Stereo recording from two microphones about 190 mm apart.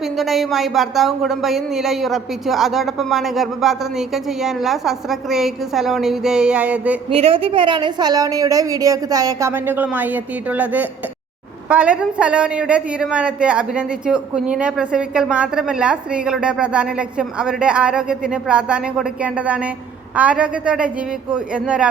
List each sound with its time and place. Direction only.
0.0 s a woman's voice: centre (ahead or behind)
7.1 s a woman's voice: 30° right (ahead or behind); by 21.8 s 5° right (ahead or behind)